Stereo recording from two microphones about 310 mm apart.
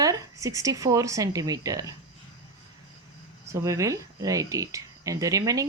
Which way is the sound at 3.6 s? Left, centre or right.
Centre.